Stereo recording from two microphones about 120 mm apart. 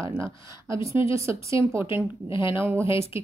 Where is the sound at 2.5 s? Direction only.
20° right (ahead or behind).